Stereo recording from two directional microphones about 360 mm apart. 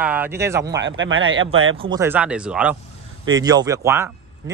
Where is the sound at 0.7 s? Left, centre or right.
Right.